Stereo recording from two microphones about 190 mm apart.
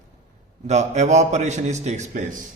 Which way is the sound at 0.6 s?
35° right (ahead or behind).